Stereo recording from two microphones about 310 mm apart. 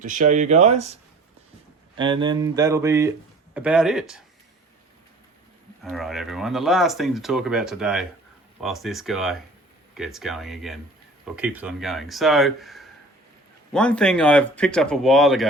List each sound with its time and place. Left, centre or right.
0.0 s speech: right
2.0 s speech: centre
5.8 s speech: centre